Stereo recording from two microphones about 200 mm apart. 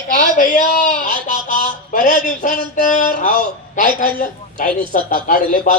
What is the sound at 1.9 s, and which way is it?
A man's voice, 40° left (ahead or behind).